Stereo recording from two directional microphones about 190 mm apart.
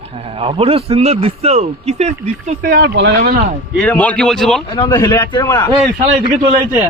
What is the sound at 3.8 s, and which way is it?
Speech, 5° left (ahead or behind).